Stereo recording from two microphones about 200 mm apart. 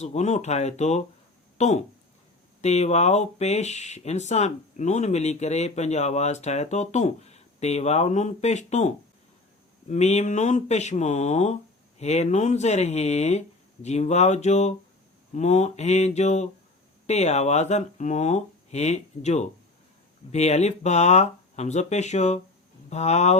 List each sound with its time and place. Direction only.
0.0 s speech: 35° left (ahead or behind)
9.9 s speech: 35° left (ahead or behind)